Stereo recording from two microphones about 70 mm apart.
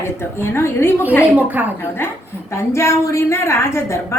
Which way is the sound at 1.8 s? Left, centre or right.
Left.